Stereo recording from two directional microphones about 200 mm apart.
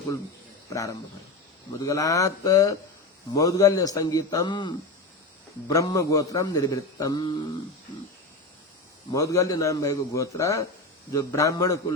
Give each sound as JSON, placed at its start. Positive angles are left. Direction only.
{"t": 0.7, "sound": "a man's voice", "side_deg": 15}
{"t": 9.1, "sound": "a man's voice", "side_deg": 15}